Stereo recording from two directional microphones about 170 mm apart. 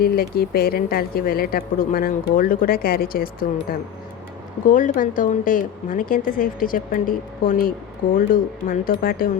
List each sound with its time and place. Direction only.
0.0 s speech: 65° left (ahead or behind)
4.7 s a woman's voice: 50° left (ahead or behind)